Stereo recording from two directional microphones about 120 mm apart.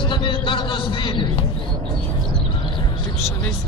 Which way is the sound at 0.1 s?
40° left (ahead or behind).